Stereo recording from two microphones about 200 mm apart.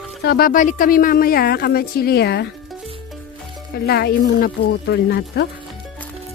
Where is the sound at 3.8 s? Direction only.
50° left (ahead or behind).